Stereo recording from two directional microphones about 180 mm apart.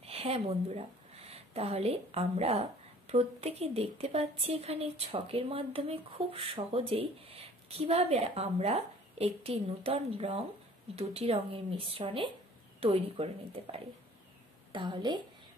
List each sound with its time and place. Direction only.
0.0 s a woman's voice: 35° right (ahead or behind)